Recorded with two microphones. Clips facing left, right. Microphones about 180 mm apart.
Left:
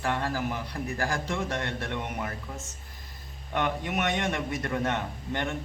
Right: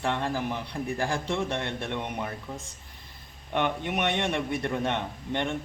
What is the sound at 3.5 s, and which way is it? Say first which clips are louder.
Speech: right 1 dB; 25° right (ahead or behind).